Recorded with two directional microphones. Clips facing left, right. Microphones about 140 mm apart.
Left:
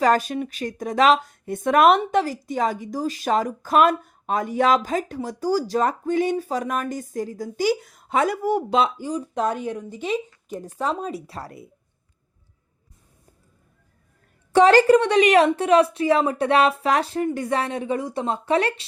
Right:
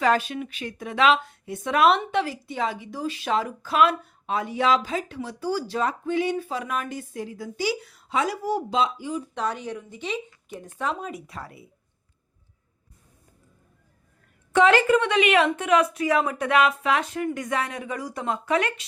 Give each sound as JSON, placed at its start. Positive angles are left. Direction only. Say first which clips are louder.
{"t": 0.0, "sound": "a woman's voice", "louder": "left 3 dB", "side_deg": 40}
{"t": 9.0, "sound": "a woman's voice", "louder": "left 4 dB", "side_deg": 40}
{"t": 14.5, "sound": "a woman's voice", "louder": "left 4 dB", "side_deg": 35}